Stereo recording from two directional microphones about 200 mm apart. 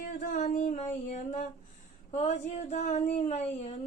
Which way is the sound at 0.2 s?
40° left (ahead or behind).